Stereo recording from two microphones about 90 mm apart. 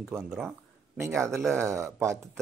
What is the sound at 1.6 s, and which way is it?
Speech, 30° right (ahead or behind).